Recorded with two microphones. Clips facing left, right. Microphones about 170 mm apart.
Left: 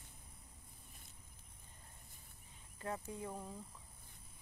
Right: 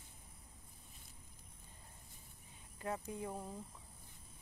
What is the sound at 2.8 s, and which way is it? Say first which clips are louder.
Speech: right 2 dB; 20° right (ahead or behind).